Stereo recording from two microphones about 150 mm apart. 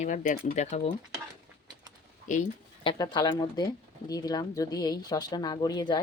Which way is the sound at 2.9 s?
25° left (ahead or behind).